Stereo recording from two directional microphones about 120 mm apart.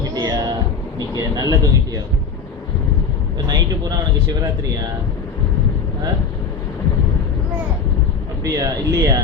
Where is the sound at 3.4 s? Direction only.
35° right (ahead or behind).